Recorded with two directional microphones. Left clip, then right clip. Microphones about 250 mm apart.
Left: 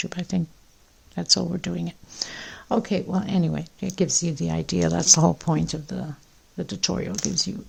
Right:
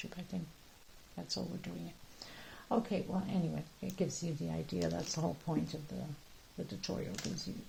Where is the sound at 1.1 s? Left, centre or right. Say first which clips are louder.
Left 19 dB; left.